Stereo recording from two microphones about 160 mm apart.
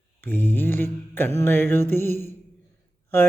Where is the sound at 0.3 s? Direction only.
10° left (ahead or behind).